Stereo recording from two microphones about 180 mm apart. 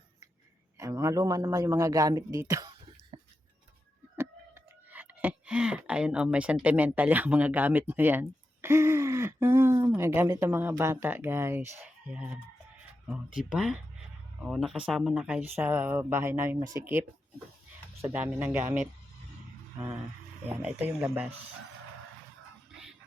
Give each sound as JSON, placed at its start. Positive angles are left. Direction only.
{"t": 0.8, "sound": "a man's voice", "side_deg": -20}
{"t": 4.2, "sound": "a sound", "side_deg": -10}
{"t": 10.2, "sound": "speech", "side_deg": -15}
{"t": 13.5, "sound": "speech", "side_deg": -5}
{"t": 20.5, "sound": "speech", "side_deg": -10}